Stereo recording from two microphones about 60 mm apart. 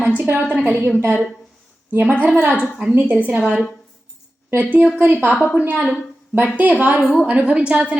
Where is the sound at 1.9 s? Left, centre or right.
Right.